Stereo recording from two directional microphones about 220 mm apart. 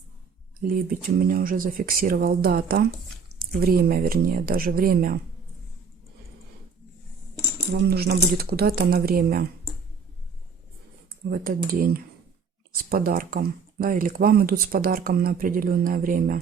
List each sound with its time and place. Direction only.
0.7 s speech: 40° right (ahead or behind)
7.7 s speech: 45° right (ahead or behind)
11.3 s speech: 40° right (ahead or behind)